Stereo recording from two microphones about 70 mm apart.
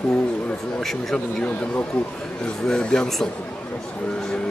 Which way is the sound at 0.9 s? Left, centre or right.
Centre.